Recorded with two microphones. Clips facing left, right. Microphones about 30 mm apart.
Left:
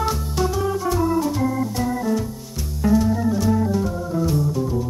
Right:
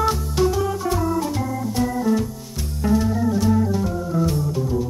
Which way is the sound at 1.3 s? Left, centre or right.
Centre.